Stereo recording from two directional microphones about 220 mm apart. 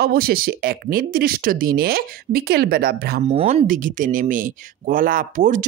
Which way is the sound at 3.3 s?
30° right (ahead or behind).